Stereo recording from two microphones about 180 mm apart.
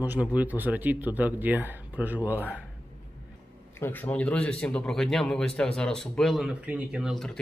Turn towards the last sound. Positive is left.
turn(degrees=0)  # may be behind; listen again after turning